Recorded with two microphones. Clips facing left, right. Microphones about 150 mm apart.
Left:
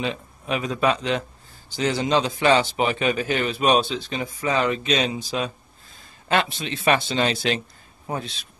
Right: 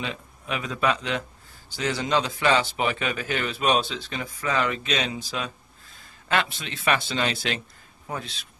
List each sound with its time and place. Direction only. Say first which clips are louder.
0.0 s a man's voice: left 5 dB; 25° left (ahead or behind)